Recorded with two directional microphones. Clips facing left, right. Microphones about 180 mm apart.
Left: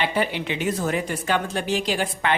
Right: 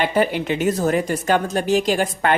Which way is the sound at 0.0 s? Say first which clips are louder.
Right 5 dB; 45° right (ahead or behind).